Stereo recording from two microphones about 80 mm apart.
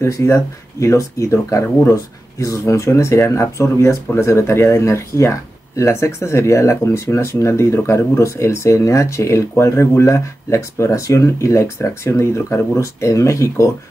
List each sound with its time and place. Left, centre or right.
0.0 s speech: left